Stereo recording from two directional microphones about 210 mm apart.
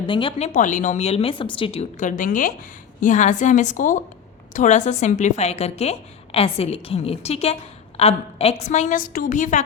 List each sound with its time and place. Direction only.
0.0 s a woman's voice: 25° left (ahead or behind)